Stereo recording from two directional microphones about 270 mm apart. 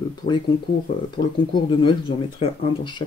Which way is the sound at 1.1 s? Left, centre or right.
Centre.